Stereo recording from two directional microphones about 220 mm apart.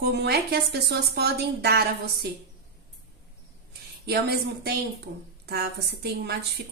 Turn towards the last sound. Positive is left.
turn(degrees=-45)  # may be behind; listen again after turning